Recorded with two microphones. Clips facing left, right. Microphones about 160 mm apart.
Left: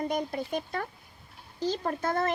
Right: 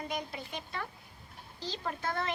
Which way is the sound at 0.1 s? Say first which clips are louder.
Left 8 dB; 45° left (ahead or behind).